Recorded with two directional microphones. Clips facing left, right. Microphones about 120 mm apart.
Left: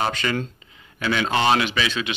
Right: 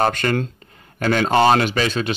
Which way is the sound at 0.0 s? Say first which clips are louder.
Right 5 dB; 50° right (ahead or behind).